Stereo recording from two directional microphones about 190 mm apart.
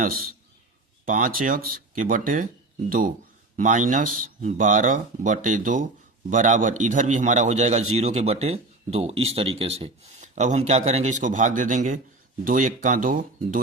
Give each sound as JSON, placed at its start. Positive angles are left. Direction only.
{"t": 1.0, "sound": "speech", "side_deg": -45}
{"t": 3.6, "sound": "speech", "side_deg": -40}